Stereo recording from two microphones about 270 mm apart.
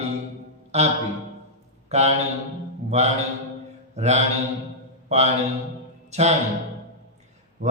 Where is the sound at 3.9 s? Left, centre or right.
Right.